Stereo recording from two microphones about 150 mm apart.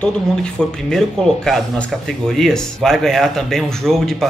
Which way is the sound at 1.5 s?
5° left (ahead or behind).